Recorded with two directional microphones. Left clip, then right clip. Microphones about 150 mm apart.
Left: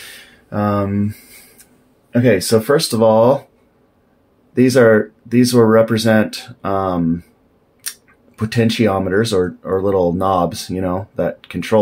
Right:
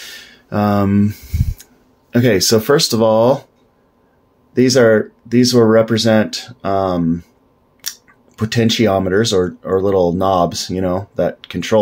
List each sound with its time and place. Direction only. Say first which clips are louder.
0.5 s speech: right 2 dB; 40° right (ahead or behind); by 3.4 s 15° right (ahead or behind)
4.6 s speech: even; 10° right (ahead or behind)
7.8 s scissors: right 4 dB; 20° right (ahead or behind)
8.4 s speech: right 1 dB; 20° right (ahead or behind)